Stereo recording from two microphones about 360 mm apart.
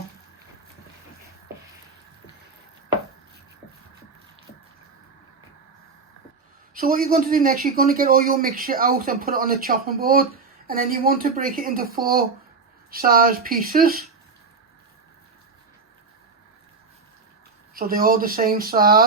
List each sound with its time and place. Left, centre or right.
6.7 s speech: right
17.7 s speech: right